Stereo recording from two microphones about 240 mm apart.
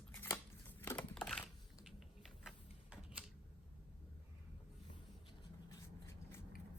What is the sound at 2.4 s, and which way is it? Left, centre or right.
Typewriter, centre.